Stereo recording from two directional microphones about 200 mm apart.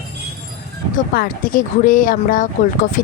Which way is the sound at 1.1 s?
45° left (ahead or behind).